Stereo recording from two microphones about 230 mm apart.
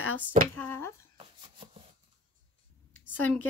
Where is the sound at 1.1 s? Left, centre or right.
Right.